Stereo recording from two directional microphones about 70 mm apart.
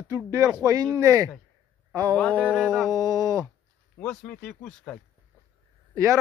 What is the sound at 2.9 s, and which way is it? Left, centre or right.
Speech, right.